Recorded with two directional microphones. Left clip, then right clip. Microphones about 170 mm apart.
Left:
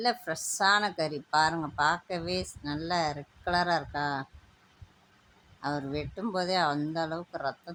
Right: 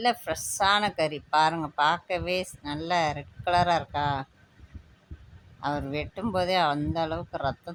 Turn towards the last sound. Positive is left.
turn(degrees=-15)  # may be behind; listen again after turning